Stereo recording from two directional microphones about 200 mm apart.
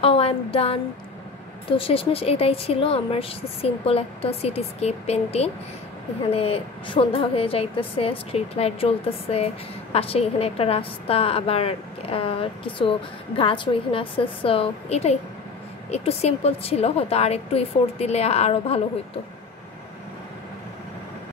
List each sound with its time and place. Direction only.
0.0 s a woman's voice: 30° left (ahead or behind)